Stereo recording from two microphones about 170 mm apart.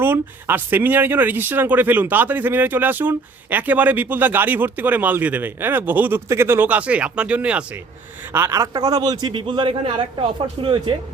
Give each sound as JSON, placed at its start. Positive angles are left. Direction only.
{"t": 0.0, "sound": "a man's voice", "side_deg": -10}